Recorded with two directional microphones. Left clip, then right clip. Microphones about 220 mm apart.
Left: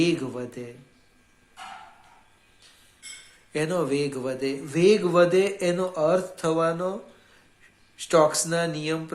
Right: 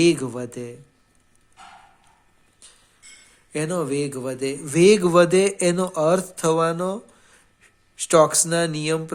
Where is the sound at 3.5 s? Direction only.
35° right (ahead or behind).